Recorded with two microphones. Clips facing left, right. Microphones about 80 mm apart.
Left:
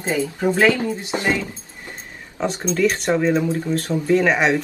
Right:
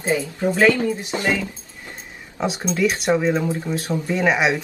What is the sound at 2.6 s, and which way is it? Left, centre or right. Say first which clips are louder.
Speech: left 1 dB; centre.